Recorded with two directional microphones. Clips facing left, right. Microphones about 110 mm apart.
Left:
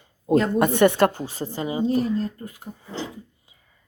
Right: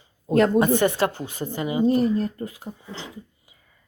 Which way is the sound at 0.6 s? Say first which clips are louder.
Left 2 dB; 60° left (ahead or behind).